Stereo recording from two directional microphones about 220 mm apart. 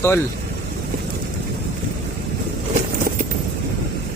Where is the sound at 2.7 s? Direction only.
40° right (ahead or behind).